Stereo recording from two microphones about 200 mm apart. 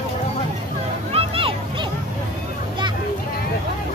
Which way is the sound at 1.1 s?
30° right (ahead or behind).